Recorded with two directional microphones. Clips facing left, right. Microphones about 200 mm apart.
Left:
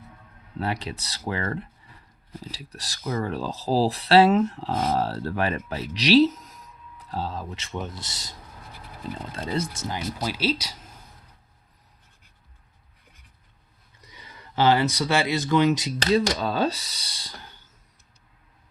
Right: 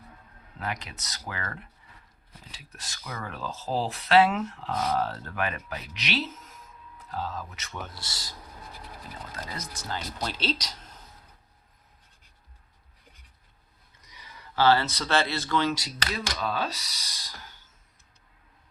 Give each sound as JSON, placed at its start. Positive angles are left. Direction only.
{"t": 0.6, "sound": "speech", "side_deg": 30}
{"t": 9.3, "sound": "speech", "side_deg": 30}
{"t": 10.2, "sound": "speech", "side_deg": 10}
{"t": 14.5, "sound": "speech", "side_deg": 15}